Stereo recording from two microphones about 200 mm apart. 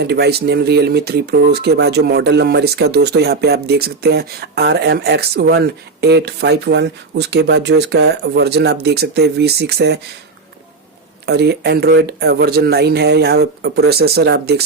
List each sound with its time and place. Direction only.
0.0 s speech: 55° right (ahead or behind)
11.3 s speech: 55° right (ahead or behind)